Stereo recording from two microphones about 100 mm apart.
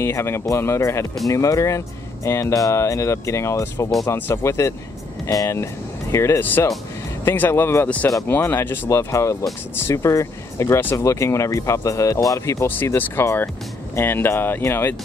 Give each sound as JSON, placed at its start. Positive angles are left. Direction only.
{"t": 0.0, "sound": "speech", "side_deg": 25}